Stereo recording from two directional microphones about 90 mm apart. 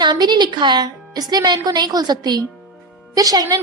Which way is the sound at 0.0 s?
55° right (ahead or behind).